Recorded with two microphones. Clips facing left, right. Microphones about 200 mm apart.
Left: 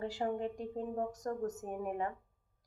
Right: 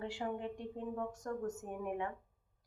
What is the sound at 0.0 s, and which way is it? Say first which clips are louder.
A woman's voice: left 4 dB; 40° left (ahead or behind).